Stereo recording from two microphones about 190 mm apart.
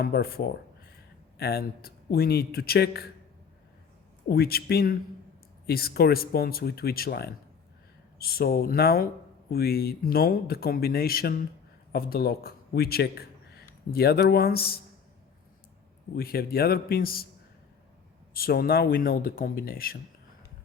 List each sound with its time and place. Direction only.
0.0 s speech: 55° left (ahead or behind)
4.3 s a man's voice: 55° left (ahead or behind)
16.1 s speech: 55° left (ahead or behind)
18.3 s speech: 50° left (ahead or behind)